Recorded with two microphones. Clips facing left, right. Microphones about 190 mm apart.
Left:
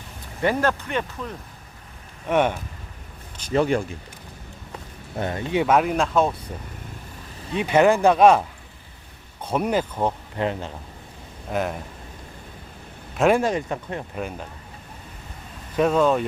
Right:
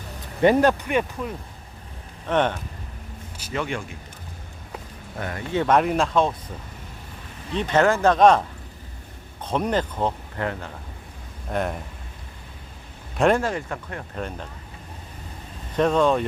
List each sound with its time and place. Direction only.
0.4 s speech: 20° right (ahead or behind)
2.3 s speech: 10° left (ahead or behind)
3.5 s speech: 35° left (ahead or behind)
5.2 s speech: 20° left (ahead or behind)
5.6 s speech: 5° left (ahead or behind)
7.5 s speech: 10° left (ahead or behind)
10.3 s speech: 20° left (ahead or behind)
11.5 s speech: centre (ahead or behind)
13.1 s speech: 5° left (ahead or behind)
13.4 s speech: 20° left (ahead or behind)
14.2 s speech: 5° left (ahead or behind)
15.7 s speech: 5° left (ahead or behind)